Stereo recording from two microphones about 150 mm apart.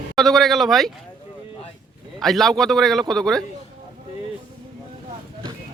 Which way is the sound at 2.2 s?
Centre (ahead or behind).